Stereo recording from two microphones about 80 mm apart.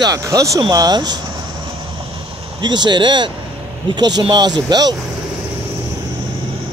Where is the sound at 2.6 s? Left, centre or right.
Right.